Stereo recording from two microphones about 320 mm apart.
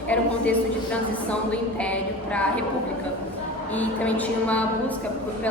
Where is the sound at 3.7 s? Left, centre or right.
Centre.